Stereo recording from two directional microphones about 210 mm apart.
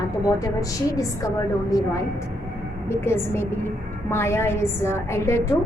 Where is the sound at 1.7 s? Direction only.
15° left (ahead or behind).